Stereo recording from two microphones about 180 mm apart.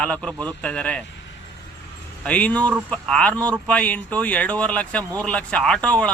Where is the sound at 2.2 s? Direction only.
5° left (ahead or behind).